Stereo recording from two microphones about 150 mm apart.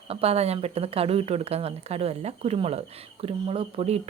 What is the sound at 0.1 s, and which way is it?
A woman's voice, 40° right (ahead or behind).